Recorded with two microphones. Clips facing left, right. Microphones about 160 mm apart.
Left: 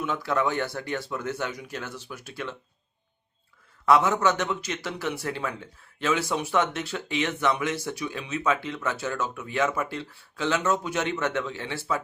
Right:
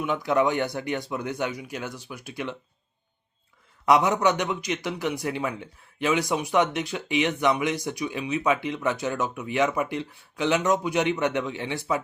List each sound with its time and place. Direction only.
0.0 s a man's voice: 15° right (ahead or behind)
3.8 s a man's voice: 15° right (ahead or behind)